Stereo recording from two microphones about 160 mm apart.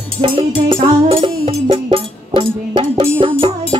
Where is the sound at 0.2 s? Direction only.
35° right (ahead or behind).